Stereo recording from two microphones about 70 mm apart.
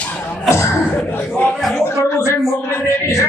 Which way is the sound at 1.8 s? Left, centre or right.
Left.